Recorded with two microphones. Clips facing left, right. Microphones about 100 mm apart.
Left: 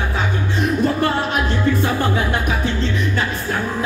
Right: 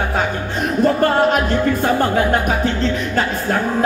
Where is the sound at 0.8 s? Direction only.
45° right (ahead or behind).